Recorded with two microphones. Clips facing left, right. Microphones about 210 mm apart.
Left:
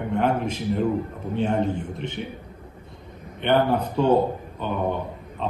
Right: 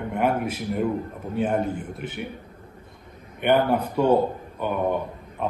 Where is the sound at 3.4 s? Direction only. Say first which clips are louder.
Even; 10° right (ahead or behind).